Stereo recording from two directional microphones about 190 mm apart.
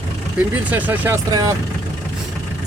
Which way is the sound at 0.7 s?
10° right (ahead or behind).